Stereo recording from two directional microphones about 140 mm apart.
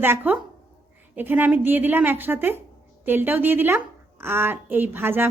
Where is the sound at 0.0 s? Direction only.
15° right (ahead or behind).